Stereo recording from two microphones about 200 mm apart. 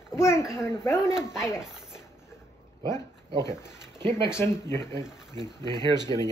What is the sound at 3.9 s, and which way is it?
Speech, 25° right (ahead or behind).